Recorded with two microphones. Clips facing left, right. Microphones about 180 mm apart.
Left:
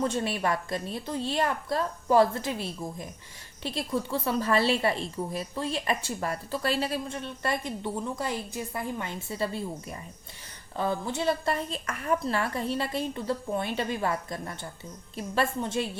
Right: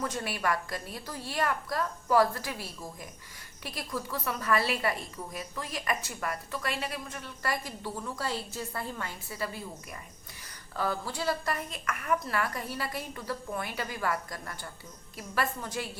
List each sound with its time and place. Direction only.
0.0 s a woman's voice: 25° left (ahead or behind)
10.8 s a woman's voice: 20° left (ahead or behind)